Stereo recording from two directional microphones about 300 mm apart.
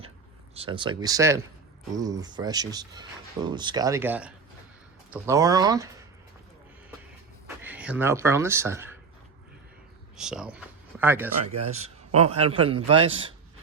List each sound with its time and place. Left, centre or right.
0.5 s speech: centre
7.6 s speech: centre
10.2 s speech: centre
11.4 s a man's voice: right